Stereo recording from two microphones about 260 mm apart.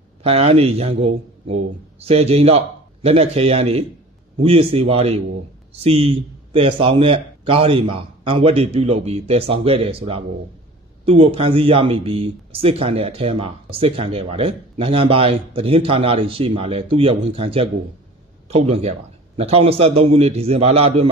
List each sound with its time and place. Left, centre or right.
0.2 s speech: right